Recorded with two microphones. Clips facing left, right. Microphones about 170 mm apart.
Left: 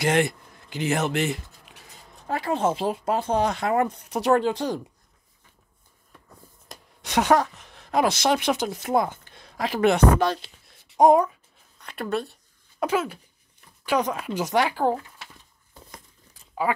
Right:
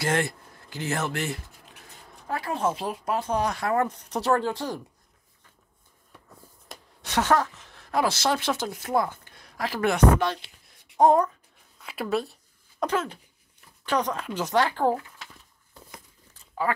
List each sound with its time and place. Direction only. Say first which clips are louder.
0.0 s speech: left 4 dB; 20° left (ahead or behind)
7.0 s speech: left 3 dB; 15° left (ahead or behind)
10.1 s speech: left 3 dB; 35° left (ahead or behind)
11.0 s speech: left 2 dB; 10° left (ahead or behind)
11.8 s a woman's voice: even; 5° right (ahead or behind)
12.8 s speech: left 2 dB; 10° left (ahead or behind)
16.7 s speech: left 2 dB; 15° left (ahead or behind)